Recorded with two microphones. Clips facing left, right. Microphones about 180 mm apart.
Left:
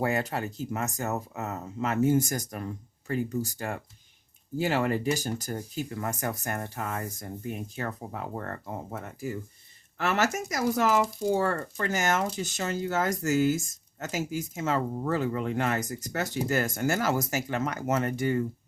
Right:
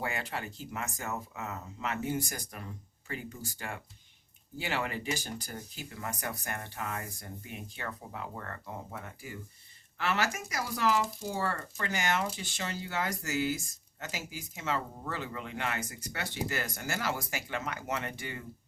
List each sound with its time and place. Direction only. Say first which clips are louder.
0.0 s speech: left 8 dB; 40° left (ahead or behind)